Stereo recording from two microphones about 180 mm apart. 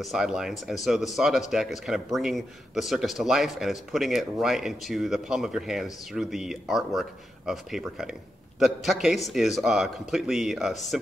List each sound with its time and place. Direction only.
0.0 s speech: centre (ahead or behind)